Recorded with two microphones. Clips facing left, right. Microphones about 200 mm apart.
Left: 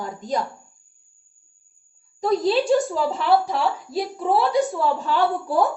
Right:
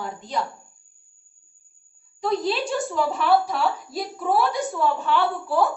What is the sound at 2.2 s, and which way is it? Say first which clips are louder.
Speech: left 3 dB; 40° left (ahead or behind).